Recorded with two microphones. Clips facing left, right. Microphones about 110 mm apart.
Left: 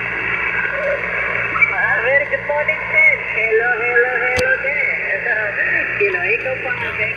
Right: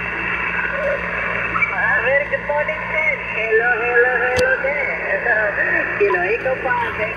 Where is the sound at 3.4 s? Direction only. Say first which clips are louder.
Even; 30° right (ahead or behind).